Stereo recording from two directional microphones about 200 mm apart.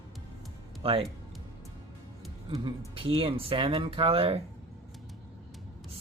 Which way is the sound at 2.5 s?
25° right (ahead or behind).